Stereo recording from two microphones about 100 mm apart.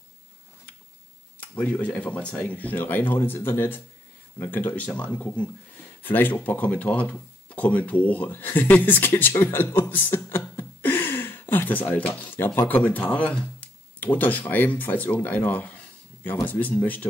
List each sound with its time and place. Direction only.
1.4 s speech: 15° left (ahead or behind)